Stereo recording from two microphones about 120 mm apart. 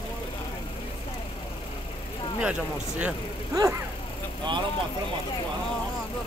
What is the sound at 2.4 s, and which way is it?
Speech, 10° right (ahead or behind).